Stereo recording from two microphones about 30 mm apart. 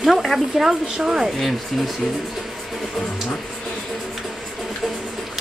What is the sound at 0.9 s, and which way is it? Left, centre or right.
Speech, right.